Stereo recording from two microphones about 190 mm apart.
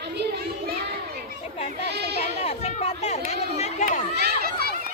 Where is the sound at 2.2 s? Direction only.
30° left (ahead or behind).